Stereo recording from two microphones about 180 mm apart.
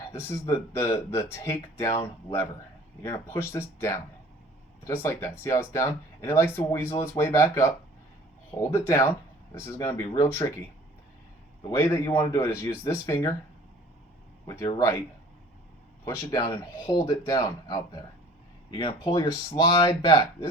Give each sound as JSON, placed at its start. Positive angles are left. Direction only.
{"t": 0.3, "sound": "speech", "side_deg": 15}
{"t": 4.9, "sound": "speech", "side_deg": 15}
{"t": 11.7, "sound": "speech", "side_deg": 15}
{"t": 14.4, "sound": "speech", "side_deg": 15}
{"t": 16.0, "sound": "speech", "side_deg": 15}